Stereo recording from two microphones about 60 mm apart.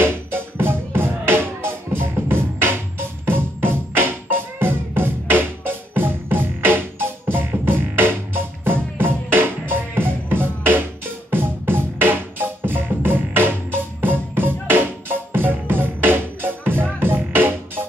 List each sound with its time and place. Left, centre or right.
0.0 s music: right